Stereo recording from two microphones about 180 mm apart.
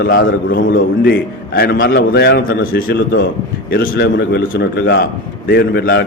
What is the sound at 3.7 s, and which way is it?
A man's voice, 70° left (ahead or behind).